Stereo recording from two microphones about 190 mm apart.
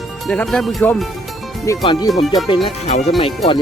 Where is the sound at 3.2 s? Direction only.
30° left (ahead or behind).